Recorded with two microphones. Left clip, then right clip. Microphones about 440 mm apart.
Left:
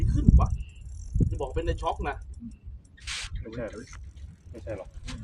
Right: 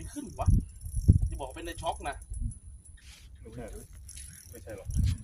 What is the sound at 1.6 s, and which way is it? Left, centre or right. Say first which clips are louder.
Speech: left 1 dB; right.